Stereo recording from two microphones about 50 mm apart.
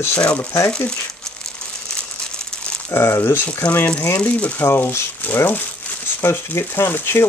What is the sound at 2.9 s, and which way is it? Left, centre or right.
Speech, left.